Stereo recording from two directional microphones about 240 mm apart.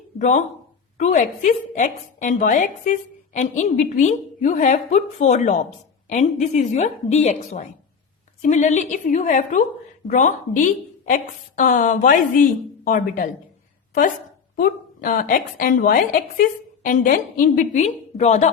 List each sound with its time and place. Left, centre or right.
0.2 s a woman's voice: left
14.5 s a woman's voice: left